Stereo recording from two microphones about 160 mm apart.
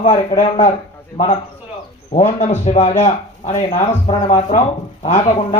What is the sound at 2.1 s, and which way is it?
Music, 50° left (ahead or behind).